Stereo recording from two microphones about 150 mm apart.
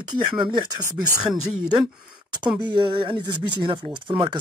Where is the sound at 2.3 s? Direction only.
30° right (ahead or behind).